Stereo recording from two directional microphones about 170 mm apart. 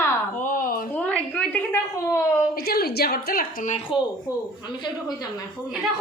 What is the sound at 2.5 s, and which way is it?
A woman's voice, 65° left (ahead or behind).